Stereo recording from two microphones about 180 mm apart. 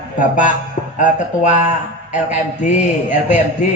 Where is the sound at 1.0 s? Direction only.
45° left (ahead or behind).